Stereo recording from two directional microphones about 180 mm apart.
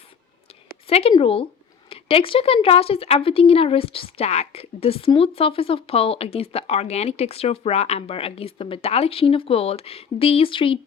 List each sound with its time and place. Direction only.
0.9 s a woman's voice: 35° left (ahead or behind)